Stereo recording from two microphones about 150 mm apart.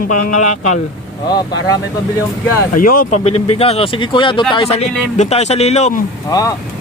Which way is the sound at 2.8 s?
70° left (ahead or behind).